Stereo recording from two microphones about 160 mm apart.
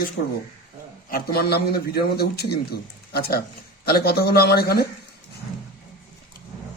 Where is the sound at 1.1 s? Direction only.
80° left.